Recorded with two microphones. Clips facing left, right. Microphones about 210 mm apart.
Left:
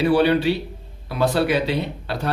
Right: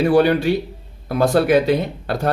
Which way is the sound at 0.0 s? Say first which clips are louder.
Right 2 dB; 45° right (ahead or behind).